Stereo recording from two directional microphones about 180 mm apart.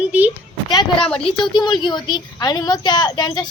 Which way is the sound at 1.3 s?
25° left (ahead or behind).